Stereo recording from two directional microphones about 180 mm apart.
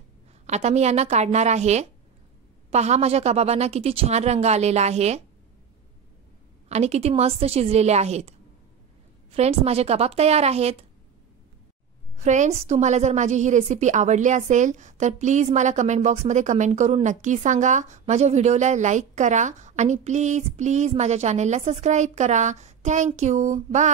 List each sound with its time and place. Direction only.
0.5 s a woman's voice: 40° right (ahead or behind)
6.7 s a woman's voice: 35° right (ahead or behind)
12.2 s a woman's voice: 40° right (ahead or behind)